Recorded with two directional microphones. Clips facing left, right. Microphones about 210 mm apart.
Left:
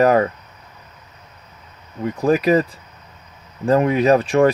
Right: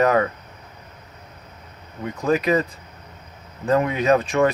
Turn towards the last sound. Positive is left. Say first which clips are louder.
# left 4 dB
turn(degrees=30)  # may be behind; listen again after turning